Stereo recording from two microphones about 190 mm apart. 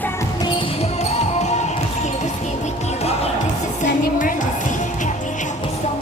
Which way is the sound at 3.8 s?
45° left (ahead or behind).